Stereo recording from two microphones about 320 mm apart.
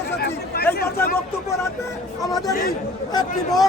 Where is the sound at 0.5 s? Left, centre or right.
Left.